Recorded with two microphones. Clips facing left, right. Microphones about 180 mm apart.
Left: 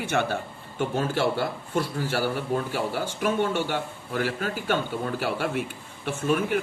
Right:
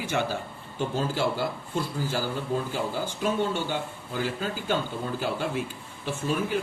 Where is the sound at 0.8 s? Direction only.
65° left (ahead or behind).